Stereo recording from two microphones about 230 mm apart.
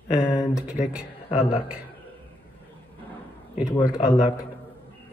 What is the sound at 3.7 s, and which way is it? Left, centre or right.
Speech, centre.